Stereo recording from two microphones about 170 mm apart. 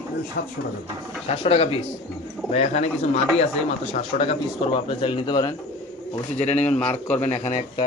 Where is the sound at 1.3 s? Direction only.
35° left (ahead or behind).